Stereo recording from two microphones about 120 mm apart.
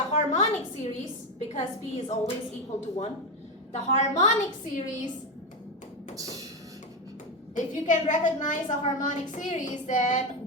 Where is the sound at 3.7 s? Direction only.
75° left (ahead or behind).